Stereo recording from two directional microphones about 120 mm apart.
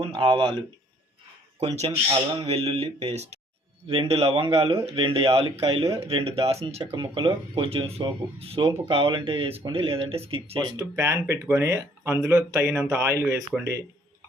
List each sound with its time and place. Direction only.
0.0 s speech: 45° right (ahead or behind)
1.7 s speech: 65° right (ahead or behind)
3.8 s speech: 50° right (ahead or behind)
6.9 s speech: 45° right (ahead or behind)
10.6 s speech: 35° right (ahead or behind)